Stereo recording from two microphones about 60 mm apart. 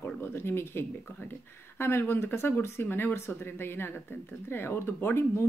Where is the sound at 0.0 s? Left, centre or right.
Left.